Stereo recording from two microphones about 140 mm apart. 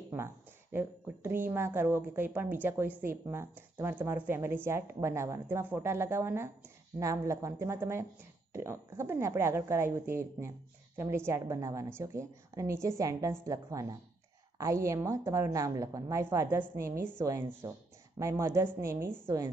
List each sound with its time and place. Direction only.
0.7 s a woman's voice: 15° right (ahead or behind)